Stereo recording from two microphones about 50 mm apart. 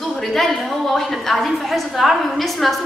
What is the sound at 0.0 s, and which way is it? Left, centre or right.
A woman's voice, centre.